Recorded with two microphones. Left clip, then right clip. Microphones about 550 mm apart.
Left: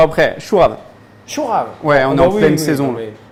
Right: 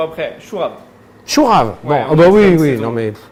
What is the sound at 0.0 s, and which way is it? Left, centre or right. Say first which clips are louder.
Speech: left 8 dB; left.